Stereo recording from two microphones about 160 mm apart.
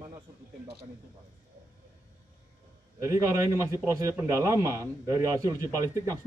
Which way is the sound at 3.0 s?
20° right (ahead or behind).